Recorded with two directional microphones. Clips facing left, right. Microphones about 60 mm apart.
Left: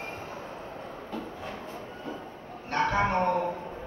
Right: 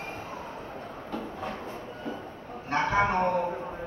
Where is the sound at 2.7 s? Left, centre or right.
Centre.